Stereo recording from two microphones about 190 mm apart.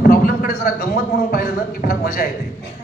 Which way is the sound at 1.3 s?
55° left (ahead or behind).